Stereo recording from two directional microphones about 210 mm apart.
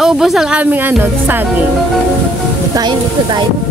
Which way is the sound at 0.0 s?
Centre (ahead or behind).